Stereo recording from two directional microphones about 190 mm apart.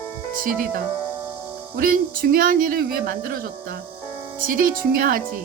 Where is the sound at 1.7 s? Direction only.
50° right (ahead or behind).